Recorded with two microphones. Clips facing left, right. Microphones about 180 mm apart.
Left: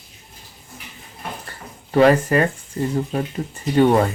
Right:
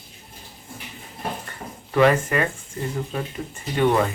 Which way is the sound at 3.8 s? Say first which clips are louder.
Left 4 dB; 35° left (ahead or behind).